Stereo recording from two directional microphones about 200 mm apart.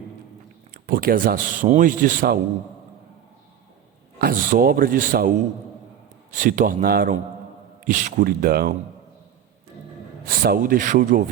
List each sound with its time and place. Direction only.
0.7 s a man's voice: 45° right (ahead or behind)
4.2 s a man's voice: 45° right (ahead or behind)
6.3 s a man's voice: 40° right (ahead or behind)
10.2 s a man's voice: 45° right (ahead or behind)